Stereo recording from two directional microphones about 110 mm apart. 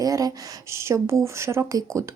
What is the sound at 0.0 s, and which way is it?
A child's voice, 35° right (ahead or behind).